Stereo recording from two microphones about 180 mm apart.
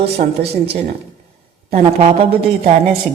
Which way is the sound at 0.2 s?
45° right (ahead or behind).